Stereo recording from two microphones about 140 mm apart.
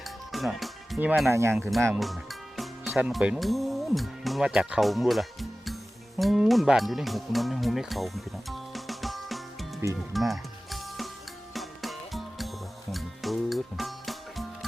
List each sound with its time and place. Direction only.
0.0 s music: centre (ahead or behind)
1.3 s speech: 20° right (ahead or behind)
2.6 s speech: centre (ahead or behind)
10.1 s music: centre (ahead or behind)